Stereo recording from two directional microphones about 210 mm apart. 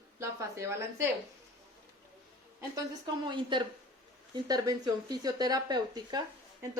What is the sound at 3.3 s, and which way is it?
A woman's voice, 20° right (ahead or behind).